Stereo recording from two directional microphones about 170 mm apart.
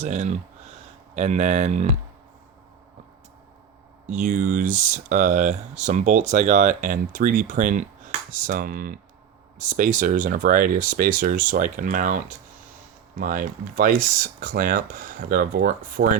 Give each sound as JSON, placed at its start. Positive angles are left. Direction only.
{"t": 0.0, "sound": "speech", "side_deg": -45}
{"t": 4.0, "sound": "speech", "side_deg": -45}